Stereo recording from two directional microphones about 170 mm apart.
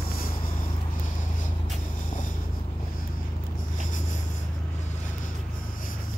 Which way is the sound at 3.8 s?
50° left (ahead or behind).